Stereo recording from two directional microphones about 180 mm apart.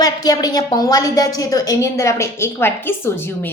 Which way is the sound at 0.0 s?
20° left (ahead or behind).